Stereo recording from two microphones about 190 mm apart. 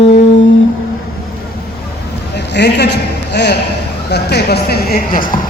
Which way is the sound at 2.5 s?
60° left (ahead or behind).